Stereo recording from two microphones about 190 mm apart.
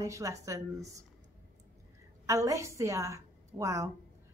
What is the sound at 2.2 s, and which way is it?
A woman's voice, 15° right (ahead or behind).